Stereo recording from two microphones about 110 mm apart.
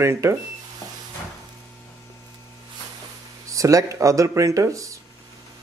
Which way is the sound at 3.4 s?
30° right (ahead or behind).